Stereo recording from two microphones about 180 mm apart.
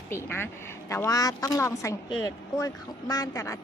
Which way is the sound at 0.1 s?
15° left (ahead or behind).